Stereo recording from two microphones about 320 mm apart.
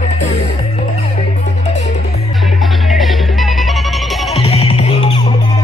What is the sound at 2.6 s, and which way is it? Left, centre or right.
Music, centre.